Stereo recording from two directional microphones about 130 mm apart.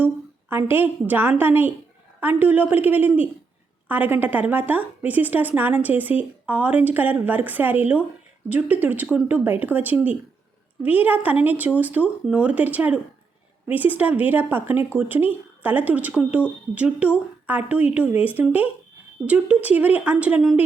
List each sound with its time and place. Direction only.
0.5 s a woman's voice: 15° right (ahead or behind)